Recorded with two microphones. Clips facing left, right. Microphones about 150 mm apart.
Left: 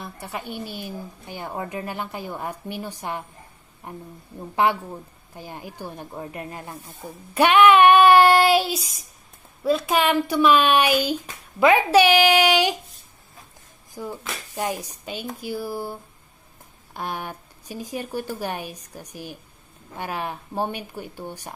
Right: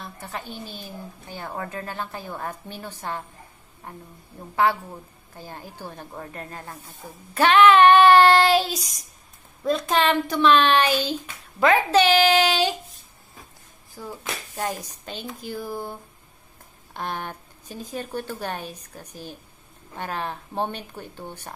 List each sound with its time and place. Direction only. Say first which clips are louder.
0.0 s a woman's voice: left 2 dB; 15° left (ahead or behind)
14.0 s a sound: left 4 dB; 15° left (ahead or behind)
14.5 s a woman's voice: left 3 dB; 10° left (ahead or behind)